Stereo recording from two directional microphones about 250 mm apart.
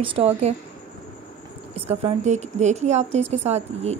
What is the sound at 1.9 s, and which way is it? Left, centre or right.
Speech, right.